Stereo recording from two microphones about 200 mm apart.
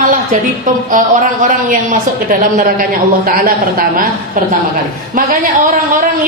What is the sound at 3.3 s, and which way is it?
Speech, 50° right (ahead or behind).